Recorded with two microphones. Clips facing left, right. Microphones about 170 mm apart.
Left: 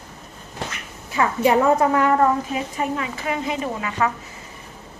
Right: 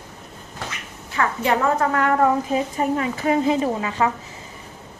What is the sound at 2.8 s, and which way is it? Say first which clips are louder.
A woman's voice: right 3 dB; 35° right (ahead or behind).